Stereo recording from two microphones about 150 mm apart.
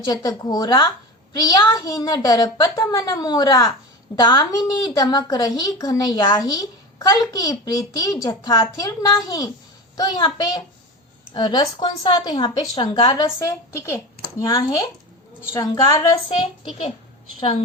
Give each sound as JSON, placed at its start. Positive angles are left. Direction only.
{"t": 0.0, "sound": "a child's voice", "side_deg": 25}